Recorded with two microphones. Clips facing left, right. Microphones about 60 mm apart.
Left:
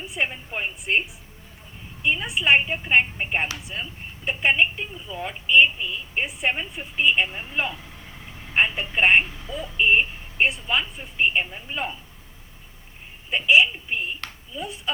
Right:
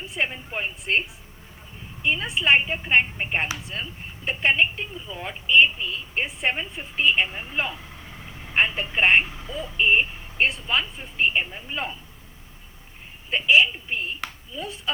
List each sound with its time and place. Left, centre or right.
0.0 s a woman's voice: centre
2.0 s a woman's voice: centre
13.3 s speech: centre